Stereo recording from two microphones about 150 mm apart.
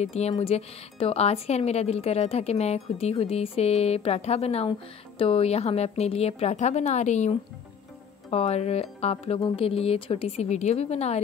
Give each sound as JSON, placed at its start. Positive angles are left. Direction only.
{"t": 0.0, "sound": "a woman's voice", "side_deg": 45}